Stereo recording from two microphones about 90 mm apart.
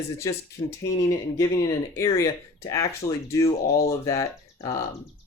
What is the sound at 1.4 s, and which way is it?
Speech, 40° left (ahead or behind).